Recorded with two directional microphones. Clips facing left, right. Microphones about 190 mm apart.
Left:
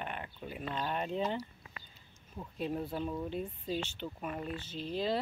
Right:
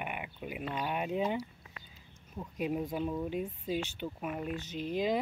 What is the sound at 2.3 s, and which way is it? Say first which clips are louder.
Speech: right 2 dB; 10° right (ahead or behind).